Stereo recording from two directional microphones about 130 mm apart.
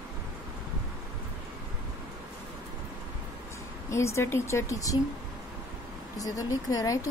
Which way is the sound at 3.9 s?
20° left (ahead or behind).